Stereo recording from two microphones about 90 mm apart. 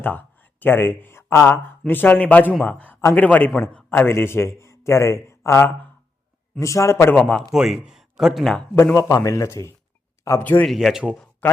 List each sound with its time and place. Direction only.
0.0 s speech: 20° left (ahead or behind)
1.9 s speech: 20° left (ahead or behind)
7.2 s speech: 10° left (ahead or behind)
7.5 s speech: 5° right (ahead or behind)
9.0 s speech: 35° left (ahead or behind)
10.4 s speech: 20° left (ahead or behind)
10.7 s speech: 5° right (ahead or behind)
11.4 s speech: 15° left (ahead or behind)